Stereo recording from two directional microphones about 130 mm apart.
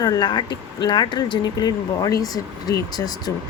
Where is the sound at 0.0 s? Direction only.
30° left (ahead or behind).